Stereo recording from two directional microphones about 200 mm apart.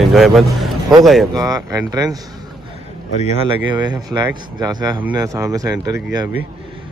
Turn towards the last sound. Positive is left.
turn(degrees=-20)  # may be behind; listen again after turning